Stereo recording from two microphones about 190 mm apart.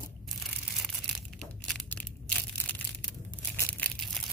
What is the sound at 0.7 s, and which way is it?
Tearing, centre (ahead or behind).